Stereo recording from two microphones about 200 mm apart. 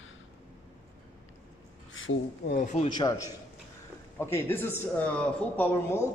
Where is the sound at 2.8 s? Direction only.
20° left (ahead or behind).